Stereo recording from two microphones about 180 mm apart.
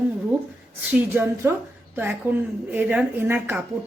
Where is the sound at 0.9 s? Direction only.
10° right (ahead or behind).